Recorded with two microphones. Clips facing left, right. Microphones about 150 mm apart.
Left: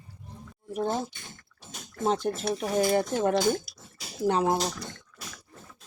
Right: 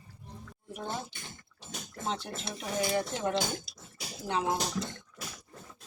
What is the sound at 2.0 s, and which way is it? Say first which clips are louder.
Speech: left 9 dB; 45° left (ahead or behind).